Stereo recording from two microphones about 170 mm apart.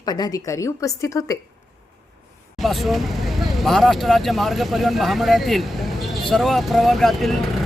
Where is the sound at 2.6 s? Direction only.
Centre (ahead or behind).